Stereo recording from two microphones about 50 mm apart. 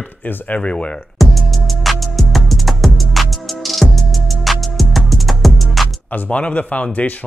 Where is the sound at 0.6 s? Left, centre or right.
Left.